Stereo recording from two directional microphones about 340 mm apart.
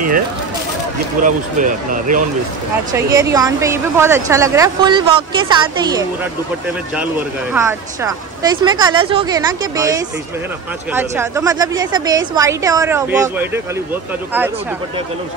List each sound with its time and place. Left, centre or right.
1.2 s speech: right
2.9 s a woman's voice: centre
7.5 s a woman's voice: centre